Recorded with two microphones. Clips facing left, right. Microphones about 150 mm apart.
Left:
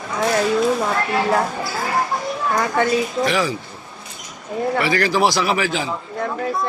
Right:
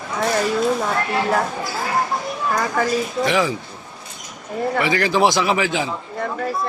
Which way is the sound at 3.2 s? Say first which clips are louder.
Right 4 dB; 20° right (ahead or behind).